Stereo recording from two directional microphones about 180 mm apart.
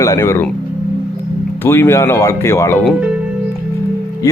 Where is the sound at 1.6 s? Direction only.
15° left (ahead or behind).